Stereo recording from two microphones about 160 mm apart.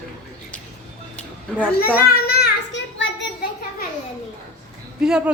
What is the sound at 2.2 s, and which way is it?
Child singing, 75° left (ahead or behind).